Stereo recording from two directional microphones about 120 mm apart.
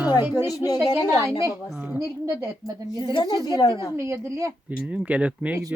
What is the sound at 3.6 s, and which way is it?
Speech, 35° left (ahead or behind).